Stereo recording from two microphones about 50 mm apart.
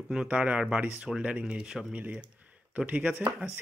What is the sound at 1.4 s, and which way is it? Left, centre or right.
Speech, centre.